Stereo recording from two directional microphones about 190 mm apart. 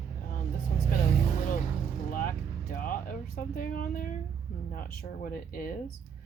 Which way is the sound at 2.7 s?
50° left (ahead or behind).